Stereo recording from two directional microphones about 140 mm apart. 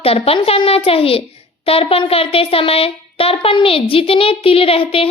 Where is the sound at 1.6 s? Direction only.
45° left (ahead or behind).